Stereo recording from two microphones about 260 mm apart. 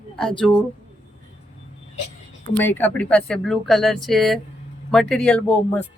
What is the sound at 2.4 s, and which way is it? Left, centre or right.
A woman's voice, centre.